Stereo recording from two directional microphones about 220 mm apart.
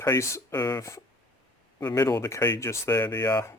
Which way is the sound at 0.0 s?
15° left (ahead or behind).